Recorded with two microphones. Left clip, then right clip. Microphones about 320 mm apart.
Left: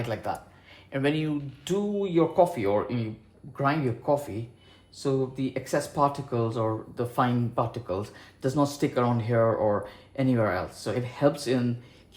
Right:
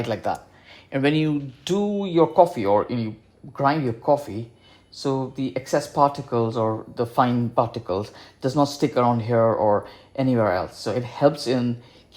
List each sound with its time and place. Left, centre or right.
0.0 s speech: right